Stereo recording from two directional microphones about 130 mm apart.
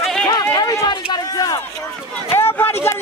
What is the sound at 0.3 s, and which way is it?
Run, 30° left (ahead or behind).